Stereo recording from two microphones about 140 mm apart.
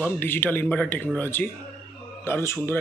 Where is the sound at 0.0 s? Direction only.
15° left (ahead or behind).